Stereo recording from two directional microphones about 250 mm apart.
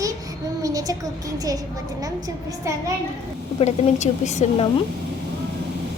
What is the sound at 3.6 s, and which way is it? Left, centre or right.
A woman's voice, left.